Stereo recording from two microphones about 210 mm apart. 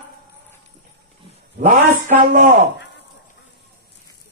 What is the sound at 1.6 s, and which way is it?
Speech, 40° right (ahead or behind).